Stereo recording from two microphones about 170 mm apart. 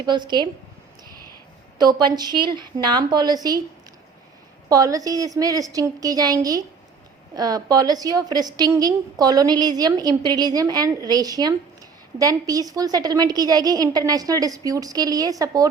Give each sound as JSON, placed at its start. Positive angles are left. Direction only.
{"t": 0.0, "sound": "a woman's voice", "side_deg": -25}
{"t": 1.8, "sound": "a woman's voice", "side_deg": -25}
{"t": 4.7, "sound": "a woman's voice", "side_deg": -20}